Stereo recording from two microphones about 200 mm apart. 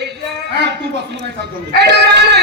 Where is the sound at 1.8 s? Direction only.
60° right (ahead or behind).